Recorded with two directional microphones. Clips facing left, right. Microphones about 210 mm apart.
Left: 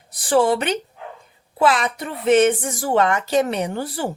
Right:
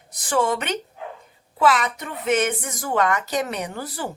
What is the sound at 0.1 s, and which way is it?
A woman's voice, 30° left (ahead or behind).